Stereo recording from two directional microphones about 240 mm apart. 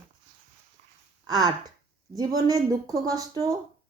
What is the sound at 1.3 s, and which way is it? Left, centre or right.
A woman's voice, centre.